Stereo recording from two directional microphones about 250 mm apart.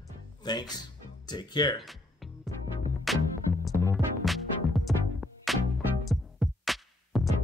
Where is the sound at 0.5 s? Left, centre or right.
Centre.